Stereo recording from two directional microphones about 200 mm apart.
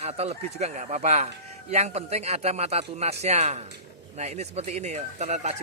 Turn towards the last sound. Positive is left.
turn(degrees=-35)  # may be behind; listen again after turning